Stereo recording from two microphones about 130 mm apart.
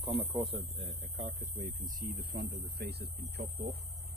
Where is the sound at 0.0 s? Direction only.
45° right (ahead or behind); by 2.0 s 80° right.